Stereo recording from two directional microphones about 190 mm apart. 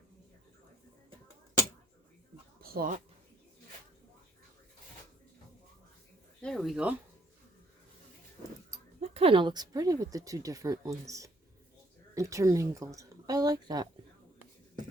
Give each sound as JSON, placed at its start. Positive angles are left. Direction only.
{"t": 2.6, "sound": "a sound", "side_deg": -50}
{"t": 6.4, "sound": "speech", "side_deg": 0}
{"t": 9.0, "sound": "a woman's voice", "side_deg": -35}